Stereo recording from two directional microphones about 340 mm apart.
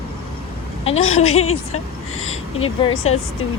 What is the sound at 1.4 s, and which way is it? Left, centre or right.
Speech, left.